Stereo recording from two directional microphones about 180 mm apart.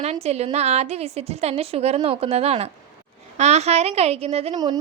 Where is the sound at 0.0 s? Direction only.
35° right (ahead or behind).